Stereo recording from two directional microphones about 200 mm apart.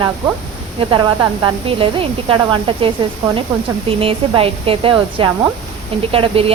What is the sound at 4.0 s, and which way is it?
A woman's voice, 25° right (ahead or behind).